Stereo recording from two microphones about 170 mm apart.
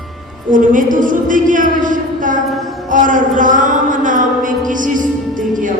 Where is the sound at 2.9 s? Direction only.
50° right (ahead or behind).